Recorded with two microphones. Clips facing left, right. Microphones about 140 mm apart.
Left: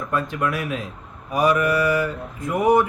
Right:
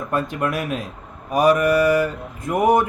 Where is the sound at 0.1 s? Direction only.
45° right (ahead or behind).